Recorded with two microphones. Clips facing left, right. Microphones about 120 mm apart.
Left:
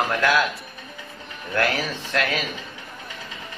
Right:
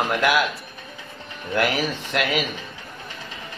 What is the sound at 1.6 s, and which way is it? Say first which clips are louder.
Speech: right 1 dB; 15° right (ahead or behind).